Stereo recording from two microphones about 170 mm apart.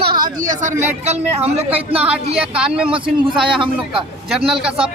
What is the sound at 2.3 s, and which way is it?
Speech, 5° right (ahead or behind).